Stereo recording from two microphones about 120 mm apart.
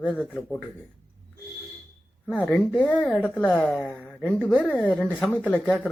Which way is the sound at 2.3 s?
15° left (ahead or behind).